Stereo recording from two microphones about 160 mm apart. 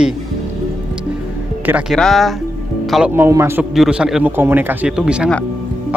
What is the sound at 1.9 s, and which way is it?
A man's voice, 5° left (ahead or behind).